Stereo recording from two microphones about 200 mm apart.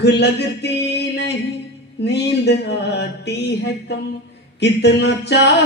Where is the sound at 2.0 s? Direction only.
55° left (ahead or behind).